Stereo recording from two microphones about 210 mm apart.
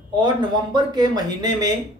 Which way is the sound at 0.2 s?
20° right (ahead or behind).